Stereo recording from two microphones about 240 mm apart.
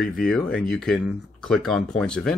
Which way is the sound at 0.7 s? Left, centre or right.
Centre.